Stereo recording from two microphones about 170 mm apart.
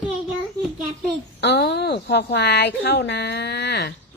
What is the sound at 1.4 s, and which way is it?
Speech, 85° left.